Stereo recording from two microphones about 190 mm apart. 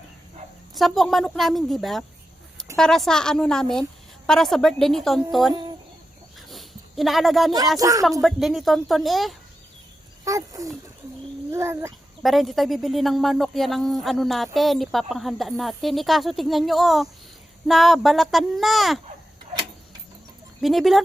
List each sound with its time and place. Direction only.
0.8 s speech: centre (ahead or behind)
6.5 s a sound: centre (ahead or behind)
7.8 s a child's voice: 15° right (ahead or behind)
8.2 s speech: centre (ahead or behind)
10.2 s a child's voice: 15° right (ahead or behind)
12.2 s speech: centre (ahead or behind)
20.6 s speech: centre (ahead or behind)